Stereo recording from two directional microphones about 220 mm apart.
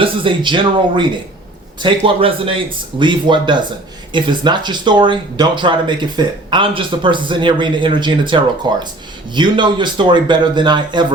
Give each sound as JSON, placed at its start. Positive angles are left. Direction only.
{"t": 0.0, "sound": "speech", "side_deg": -20}